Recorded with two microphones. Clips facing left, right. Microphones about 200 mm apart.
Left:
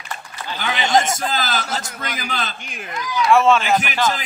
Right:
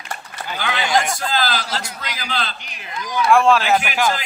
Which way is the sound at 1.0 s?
20° left (ahead or behind).